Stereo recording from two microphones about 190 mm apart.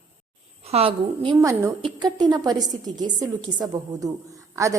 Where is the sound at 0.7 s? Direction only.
30° right (ahead or behind); by 4.8 s 15° right (ahead or behind).